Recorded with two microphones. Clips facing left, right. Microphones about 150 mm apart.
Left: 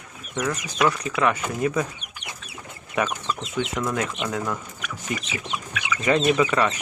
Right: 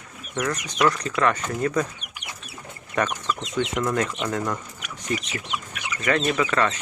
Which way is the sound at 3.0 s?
5° left (ahead or behind).